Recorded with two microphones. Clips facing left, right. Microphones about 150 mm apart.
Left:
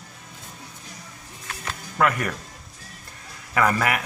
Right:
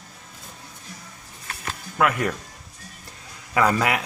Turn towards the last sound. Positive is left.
turn(degrees=-15)  # may be behind; listen again after turning